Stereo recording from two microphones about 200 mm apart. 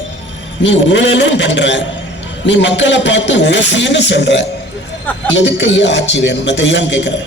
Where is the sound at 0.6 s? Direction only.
65° left (ahead or behind).